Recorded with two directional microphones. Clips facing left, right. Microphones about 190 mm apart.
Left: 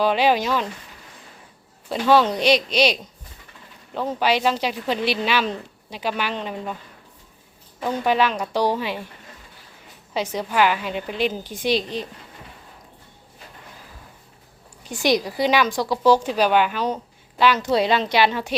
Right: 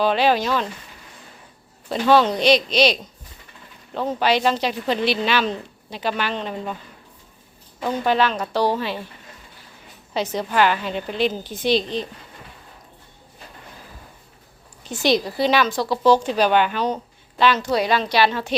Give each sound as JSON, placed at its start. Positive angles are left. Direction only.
{"t": 0.0, "sound": "speech", "side_deg": 10}
{"t": 1.9, "sound": "speech", "side_deg": 10}
{"t": 7.8, "sound": "speech", "side_deg": 10}
{"t": 10.2, "sound": "speech", "side_deg": 10}
{"t": 14.8, "sound": "speech", "side_deg": 15}
{"t": 17.7, "sound": "speech", "side_deg": 25}